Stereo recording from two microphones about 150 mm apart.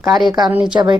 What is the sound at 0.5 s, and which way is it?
Speech, 5° right (ahead or behind).